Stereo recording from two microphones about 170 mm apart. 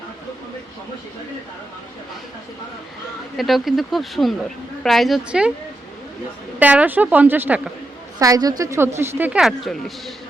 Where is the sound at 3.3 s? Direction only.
Centre (ahead or behind).